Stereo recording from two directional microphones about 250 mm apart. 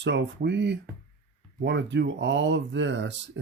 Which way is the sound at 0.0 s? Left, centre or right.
Right.